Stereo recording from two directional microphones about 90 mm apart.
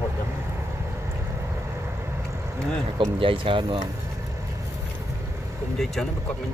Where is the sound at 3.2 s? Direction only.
80° right.